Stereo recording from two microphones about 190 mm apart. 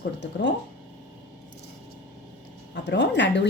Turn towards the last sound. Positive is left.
turn(degrees=65)  # may be behind; listen again after turning